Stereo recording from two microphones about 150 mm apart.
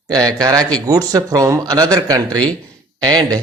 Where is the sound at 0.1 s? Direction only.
25° right (ahead or behind).